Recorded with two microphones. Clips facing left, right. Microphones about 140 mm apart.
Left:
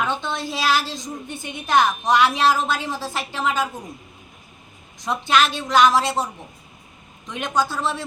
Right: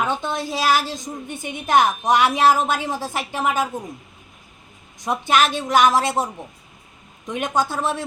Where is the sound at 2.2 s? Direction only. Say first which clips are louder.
Right 2 dB; 50° right (ahead or behind).